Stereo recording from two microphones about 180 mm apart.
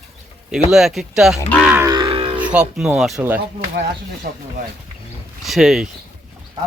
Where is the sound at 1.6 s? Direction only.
10° right (ahead or behind).